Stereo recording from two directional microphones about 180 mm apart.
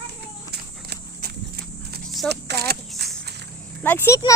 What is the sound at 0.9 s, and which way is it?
Walk, 60° right (ahead or behind).